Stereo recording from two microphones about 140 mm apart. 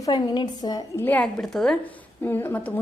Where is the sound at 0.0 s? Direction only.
30° left (ahead or behind).